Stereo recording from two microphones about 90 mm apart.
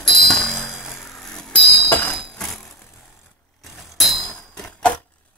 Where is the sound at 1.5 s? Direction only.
20° left (ahead or behind).